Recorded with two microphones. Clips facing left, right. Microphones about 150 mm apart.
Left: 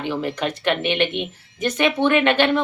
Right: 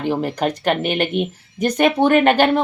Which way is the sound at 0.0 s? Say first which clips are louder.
Right 4 dB; 40° right (ahead or behind).